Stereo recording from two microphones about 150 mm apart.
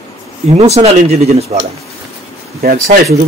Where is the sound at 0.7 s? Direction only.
45° right (ahead or behind).